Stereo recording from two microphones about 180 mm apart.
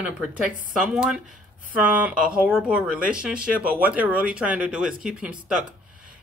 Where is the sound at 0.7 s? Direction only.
5° right (ahead or behind).